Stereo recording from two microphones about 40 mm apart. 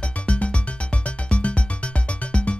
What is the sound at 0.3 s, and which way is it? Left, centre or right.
Music, left.